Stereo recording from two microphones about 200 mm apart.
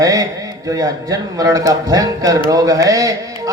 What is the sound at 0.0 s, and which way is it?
A man's voice, 15° right (ahead or behind).